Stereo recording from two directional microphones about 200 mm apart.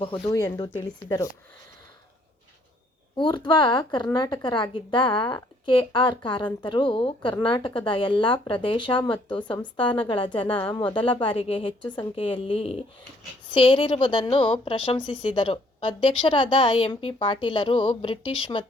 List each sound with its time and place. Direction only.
0.0 s a woman's voice: 20° left (ahead or behind)
3.2 s a woman's voice: 25° left (ahead or behind)